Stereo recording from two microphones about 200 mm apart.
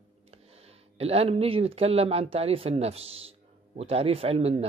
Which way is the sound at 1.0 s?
30° right (ahead or behind).